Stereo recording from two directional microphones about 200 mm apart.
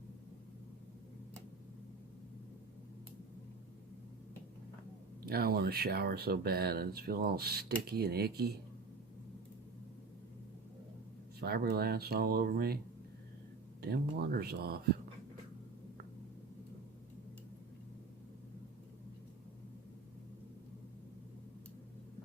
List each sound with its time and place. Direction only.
5.2 s speech: 50° right (ahead or behind)
11.3 s speech: 50° right (ahead or behind)
13.8 s speech: 50° right (ahead or behind)